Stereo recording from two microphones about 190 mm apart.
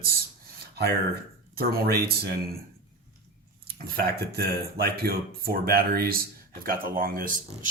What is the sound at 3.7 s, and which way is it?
Speech, 50° right (ahead or behind).